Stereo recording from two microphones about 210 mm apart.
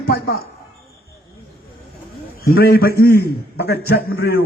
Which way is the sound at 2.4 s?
50° left (ahead or behind).